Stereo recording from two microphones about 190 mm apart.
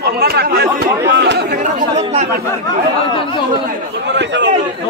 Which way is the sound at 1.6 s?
40° right (ahead or behind).